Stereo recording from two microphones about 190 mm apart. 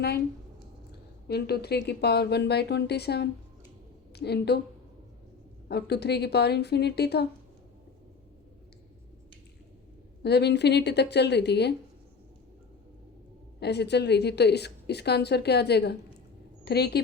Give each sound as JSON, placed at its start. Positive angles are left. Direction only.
{"t": 1.3, "sound": "a woman's voice", "side_deg": 60}
{"t": 5.6, "sound": "a woman's voice", "side_deg": 60}
{"t": 10.2, "sound": "a woman's voice", "side_deg": 60}
{"t": 13.6, "sound": "a woman's voice", "side_deg": 60}